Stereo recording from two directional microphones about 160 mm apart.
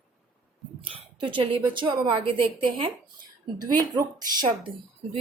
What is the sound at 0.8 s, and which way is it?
A woman's voice, 30° right (ahead or behind).